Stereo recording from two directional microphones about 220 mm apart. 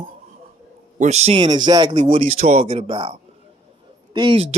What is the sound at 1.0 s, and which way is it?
Speech, 30° right (ahead or behind).